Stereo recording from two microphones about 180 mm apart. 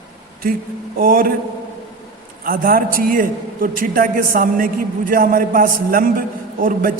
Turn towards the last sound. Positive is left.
turn(degrees=-50)  # may be behind; listen again after turning